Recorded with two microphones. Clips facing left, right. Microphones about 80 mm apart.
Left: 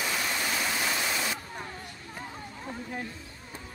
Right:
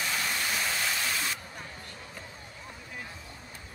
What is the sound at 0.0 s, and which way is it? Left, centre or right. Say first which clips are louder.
Waterfall: left 1 dB; centre.